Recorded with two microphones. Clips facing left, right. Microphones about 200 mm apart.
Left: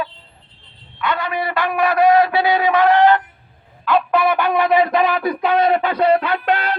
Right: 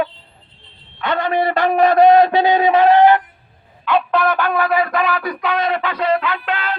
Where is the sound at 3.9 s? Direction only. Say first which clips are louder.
Even; 5° left (ahead or behind); by 6.2 s 35° left (ahead or behind).